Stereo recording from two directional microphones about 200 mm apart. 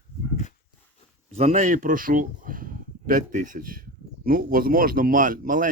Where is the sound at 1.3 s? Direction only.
35° right (ahead or behind).